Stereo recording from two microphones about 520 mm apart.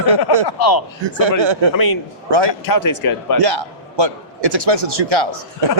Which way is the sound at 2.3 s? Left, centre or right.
Right.